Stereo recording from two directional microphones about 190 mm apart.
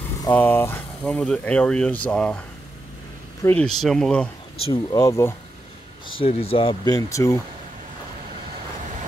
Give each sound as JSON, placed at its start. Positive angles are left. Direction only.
{"t": 0.2, "sound": "speech", "side_deg": 10}
{"t": 3.4, "sound": "speech", "side_deg": 5}
{"t": 4.9, "sound": "speech", "side_deg": 15}
{"t": 6.0, "sound": "speech", "side_deg": 30}